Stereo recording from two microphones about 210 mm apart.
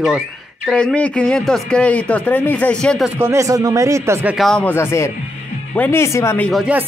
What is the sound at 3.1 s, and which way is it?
A man's voice, 15° right (ahead or behind).